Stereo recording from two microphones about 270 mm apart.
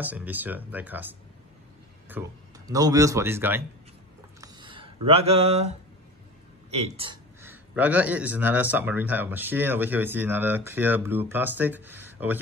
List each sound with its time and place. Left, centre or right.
0.0 s a man's voice: centre
4.4 s a sound: centre
6.7 s a man's voice: right
7.4 s speech: centre